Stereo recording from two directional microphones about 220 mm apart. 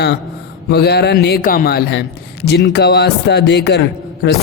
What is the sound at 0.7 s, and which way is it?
A man's voice, 50° left (ahead or behind).